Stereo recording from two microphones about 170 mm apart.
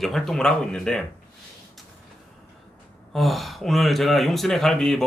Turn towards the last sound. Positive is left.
turn(degrees=0)  # may be behind; listen again after turning